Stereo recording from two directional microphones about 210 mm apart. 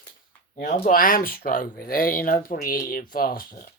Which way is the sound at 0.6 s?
40° left (ahead or behind).